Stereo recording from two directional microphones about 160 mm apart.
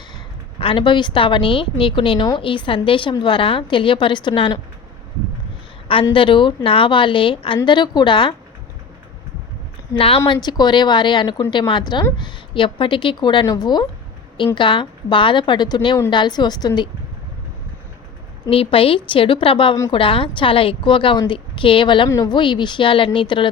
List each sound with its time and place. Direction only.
0.6 s a woman's voice: 30° left (ahead or behind)
6.1 s a woman's voice: 30° left (ahead or behind)
9.9 s a woman's voice: 35° left (ahead or behind)
18.4 s a woman's voice: 35° left (ahead or behind)